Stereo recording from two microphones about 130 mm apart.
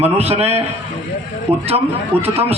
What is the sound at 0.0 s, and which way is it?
A man's voice, 50° right (ahead or behind).